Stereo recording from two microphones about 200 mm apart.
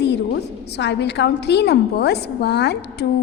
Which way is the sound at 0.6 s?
60° left (ahead or behind).